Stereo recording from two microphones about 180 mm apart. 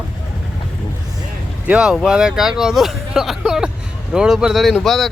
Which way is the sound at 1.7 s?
5° right (ahead or behind).